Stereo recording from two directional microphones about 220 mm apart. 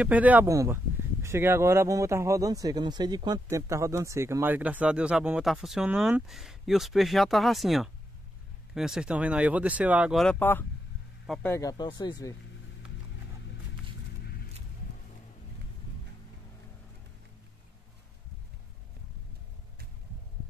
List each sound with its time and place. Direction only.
0.0 s speech: 5° right (ahead or behind)
11.5 s speech: 15° left (ahead or behind)
14.2 s a sound: 45° left (ahead or behind)